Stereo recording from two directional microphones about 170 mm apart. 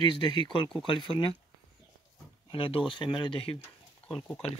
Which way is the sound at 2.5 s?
30° left (ahead or behind).